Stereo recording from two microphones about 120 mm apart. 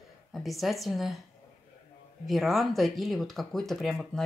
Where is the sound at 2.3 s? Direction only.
Centre (ahead or behind).